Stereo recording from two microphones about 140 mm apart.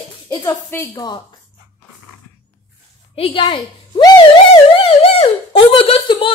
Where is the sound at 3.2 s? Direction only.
40° left (ahead or behind).